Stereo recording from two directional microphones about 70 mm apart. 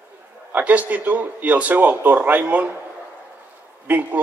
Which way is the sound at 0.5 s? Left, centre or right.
Right.